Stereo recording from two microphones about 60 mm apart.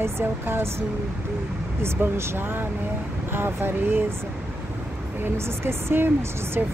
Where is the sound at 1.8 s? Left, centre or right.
Right.